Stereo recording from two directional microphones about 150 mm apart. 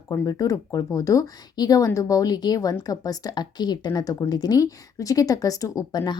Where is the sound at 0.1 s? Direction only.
25° left (ahead or behind).